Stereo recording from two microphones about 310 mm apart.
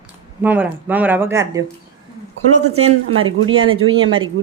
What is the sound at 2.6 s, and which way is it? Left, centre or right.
Speech, right.